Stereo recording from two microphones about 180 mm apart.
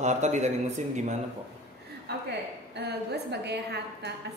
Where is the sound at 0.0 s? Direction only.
40° right (ahead or behind).